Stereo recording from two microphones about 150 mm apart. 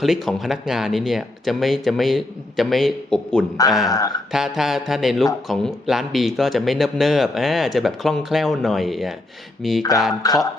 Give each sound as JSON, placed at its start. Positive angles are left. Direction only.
{"t": 0.0, "sound": "speech", "side_deg": 0}
{"t": 3.8, "sound": "speech", "side_deg": 25}
{"t": 4.3, "sound": "speech", "side_deg": 0}
{"t": 10.2, "sound": "speech", "side_deg": 25}